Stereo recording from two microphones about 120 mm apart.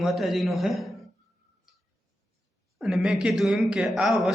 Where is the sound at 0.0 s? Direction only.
Centre (ahead or behind).